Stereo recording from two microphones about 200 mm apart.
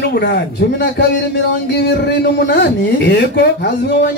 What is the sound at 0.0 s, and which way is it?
Speech, 55° left (ahead or behind).